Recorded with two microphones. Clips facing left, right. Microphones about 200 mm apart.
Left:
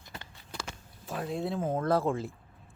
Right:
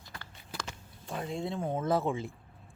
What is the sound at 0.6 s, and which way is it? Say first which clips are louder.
Speech: left 2 dB; 5° left (ahead or behind).